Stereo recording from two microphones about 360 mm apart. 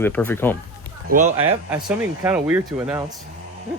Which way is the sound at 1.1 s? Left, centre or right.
Centre.